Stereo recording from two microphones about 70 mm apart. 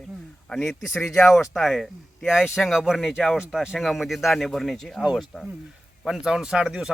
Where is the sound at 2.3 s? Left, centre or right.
Centre.